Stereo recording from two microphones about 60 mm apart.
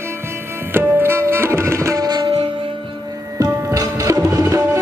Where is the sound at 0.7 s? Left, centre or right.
Right.